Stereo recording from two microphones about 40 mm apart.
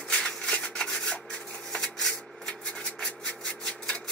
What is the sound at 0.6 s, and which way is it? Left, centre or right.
Rub, left.